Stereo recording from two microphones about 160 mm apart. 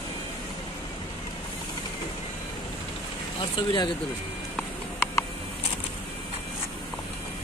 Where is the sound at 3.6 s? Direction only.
30° left (ahead or behind).